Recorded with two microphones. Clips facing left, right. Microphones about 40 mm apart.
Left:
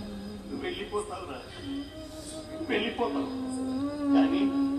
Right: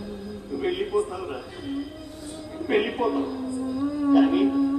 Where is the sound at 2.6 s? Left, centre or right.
Centre.